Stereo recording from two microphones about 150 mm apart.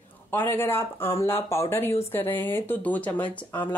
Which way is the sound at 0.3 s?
15° left (ahead or behind).